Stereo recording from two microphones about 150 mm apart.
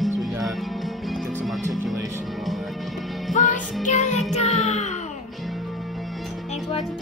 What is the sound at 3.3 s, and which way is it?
Music, 55° left (ahead or behind).